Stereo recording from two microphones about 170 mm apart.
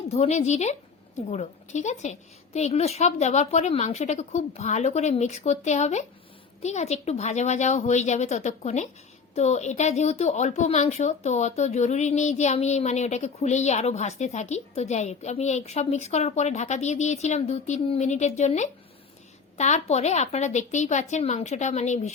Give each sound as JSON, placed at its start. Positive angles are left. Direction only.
{"t": 0.1, "sound": "a woman's voice", "side_deg": 40}